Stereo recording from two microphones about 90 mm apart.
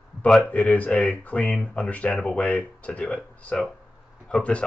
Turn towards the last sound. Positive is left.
turn(degrees=15)  # may be behind; listen again after turning